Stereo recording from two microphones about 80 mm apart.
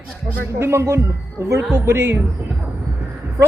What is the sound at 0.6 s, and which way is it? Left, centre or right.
A man's voice, right.